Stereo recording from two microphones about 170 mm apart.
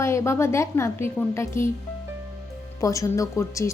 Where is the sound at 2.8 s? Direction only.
20° left (ahead or behind).